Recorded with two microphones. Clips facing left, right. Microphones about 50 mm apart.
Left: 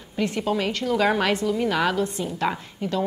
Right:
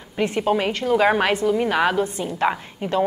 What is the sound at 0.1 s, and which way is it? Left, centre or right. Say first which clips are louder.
A woman's voice: right 4 dB; right.